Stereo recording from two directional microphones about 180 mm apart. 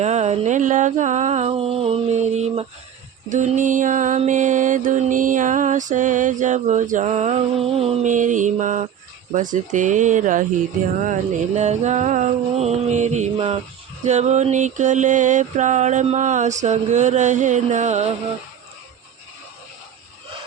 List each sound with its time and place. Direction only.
0.0 s mantra: 40° right (ahead or behind)